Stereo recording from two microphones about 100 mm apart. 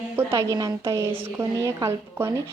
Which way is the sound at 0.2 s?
25° right (ahead or behind).